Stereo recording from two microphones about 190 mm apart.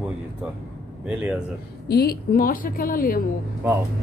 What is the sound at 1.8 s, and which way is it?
A woman's voice, 55° left (ahead or behind).